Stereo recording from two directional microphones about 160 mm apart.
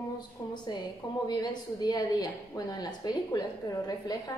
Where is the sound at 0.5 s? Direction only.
25° left (ahead or behind).